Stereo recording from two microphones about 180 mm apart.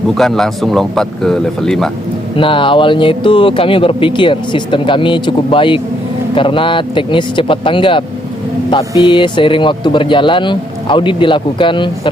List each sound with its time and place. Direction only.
0.1 s speech: centre (ahead or behind)
2.3 s speech: 30° left (ahead or behind)